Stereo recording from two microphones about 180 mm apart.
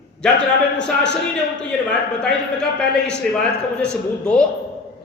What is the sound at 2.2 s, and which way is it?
A man's voice, 5° left (ahead or behind).